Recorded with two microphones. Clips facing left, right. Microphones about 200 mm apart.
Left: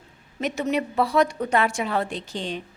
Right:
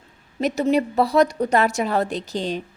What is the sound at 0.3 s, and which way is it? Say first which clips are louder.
A woman's voice: right 5 dB; 35° right (ahead or behind).